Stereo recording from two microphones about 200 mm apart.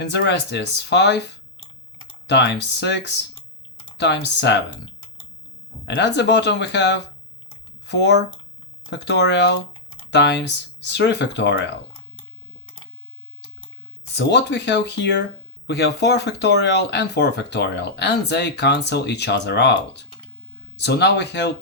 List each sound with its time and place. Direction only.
0.0 s speech: 60° left (ahead or behind)
5.9 s speech: 60° left (ahead or behind)
14.1 s speech: 60° left (ahead or behind)